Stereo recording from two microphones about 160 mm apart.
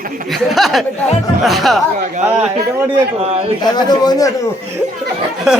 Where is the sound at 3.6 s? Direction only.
25° left (ahead or behind).